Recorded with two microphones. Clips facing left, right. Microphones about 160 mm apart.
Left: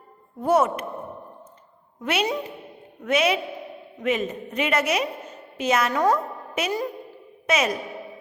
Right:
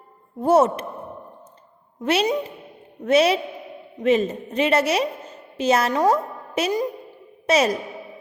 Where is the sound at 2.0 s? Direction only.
30° right (ahead or behind).